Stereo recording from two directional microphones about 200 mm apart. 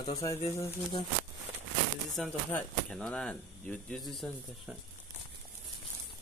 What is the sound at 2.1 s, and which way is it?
Speech, centre (ahead or behind).